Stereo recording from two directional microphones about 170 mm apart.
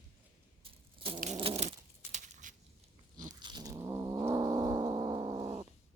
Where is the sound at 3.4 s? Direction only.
25° right (ahead or behind).